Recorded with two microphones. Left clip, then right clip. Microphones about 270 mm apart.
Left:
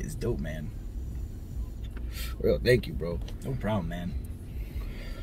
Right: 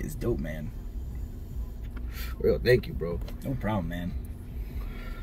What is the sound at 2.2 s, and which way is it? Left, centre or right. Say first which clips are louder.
Speech: right 1 dB; centre.